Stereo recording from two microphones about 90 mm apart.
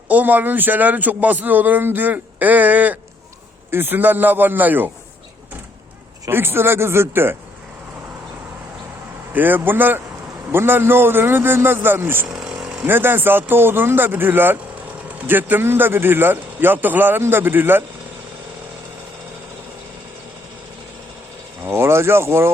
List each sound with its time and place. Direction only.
0.1 s a man's voice: 20° right (ahead or behind)
6.2 s a man's voice: 25° right (ahead or behind)
9.3 s a man's voice: 20° right (ahead or behind)
12.3 s vehicle: 5° right (ahead or behind)
12.8 s a man's voice: 25° right (ahead or behind)
21.6 s speech: 30° right (ahead or behind)